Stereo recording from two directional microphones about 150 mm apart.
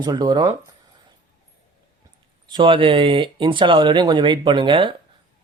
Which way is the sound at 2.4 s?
30° right (ahead or behind).